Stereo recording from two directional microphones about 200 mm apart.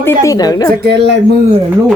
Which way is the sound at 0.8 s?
55° right (ahead or behind).